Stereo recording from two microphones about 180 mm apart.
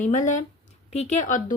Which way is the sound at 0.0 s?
45° left (ahead or behind).